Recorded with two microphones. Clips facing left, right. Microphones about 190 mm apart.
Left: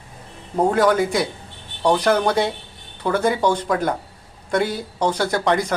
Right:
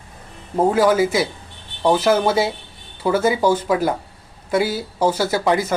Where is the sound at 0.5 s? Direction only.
5° right (ahead or behind).